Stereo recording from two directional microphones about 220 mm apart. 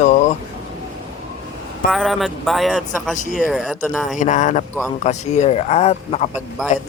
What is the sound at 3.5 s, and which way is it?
Speech, centre (ahead or behind).